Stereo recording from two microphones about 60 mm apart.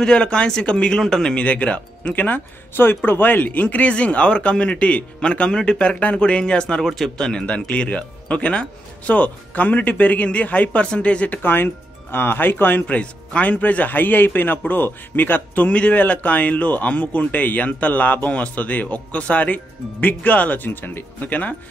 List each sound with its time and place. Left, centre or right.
0.0 s a man's voice: centre
1.4 s a man's voice: left
6.8 s a man's voice: centre; by 12.8 s left
12.8 s a man's voice: left